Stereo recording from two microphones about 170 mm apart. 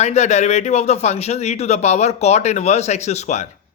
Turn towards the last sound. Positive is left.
turn(degrees=40)  # may be behind; listen again after turning